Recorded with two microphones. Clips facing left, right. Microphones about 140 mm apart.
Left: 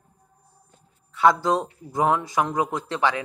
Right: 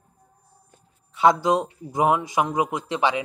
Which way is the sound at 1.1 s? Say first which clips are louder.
Right 1 dB; 20° right (ahead or behind).